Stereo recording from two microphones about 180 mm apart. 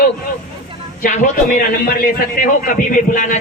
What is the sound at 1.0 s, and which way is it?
Speech, 45° left (ahead or behind).